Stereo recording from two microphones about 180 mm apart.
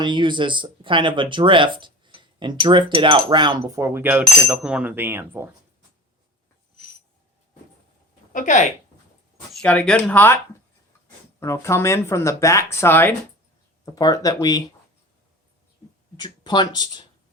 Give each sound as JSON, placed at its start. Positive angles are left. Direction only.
{"t": 0.0, "sound": "speech", "side_deg": -25}
{"t": 3.6, "sound": "cutlery", "side_deg": -15}
{"t": 8.3, "sound": "speech", "side_deg": 45}
{"t": 9.5, "sound": "speech", "side_deg": 5}
{"t": 11.3, "sound": "speech", "side_deg": 15}
{"t": 16.1, "sound": "speech", "side_deg": 25}